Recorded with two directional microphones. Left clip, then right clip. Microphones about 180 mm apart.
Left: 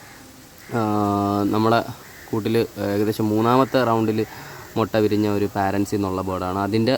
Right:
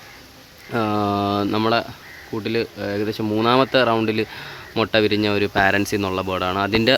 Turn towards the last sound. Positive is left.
turn(degrees=5)  # may be behind; listen again after turning